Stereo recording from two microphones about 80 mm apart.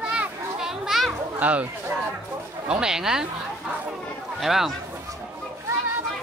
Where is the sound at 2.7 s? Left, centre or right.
Centre.